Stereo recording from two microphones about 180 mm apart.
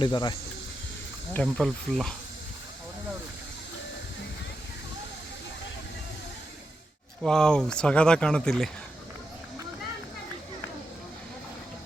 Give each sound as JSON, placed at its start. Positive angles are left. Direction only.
{"t": 0.0, "sound": "speech", "side_deg": 25}
{"t": 1.3, "sound": "speech", "side_deg": 5}
{"t": 7.2, "sound": "speech", "side_deg": 5}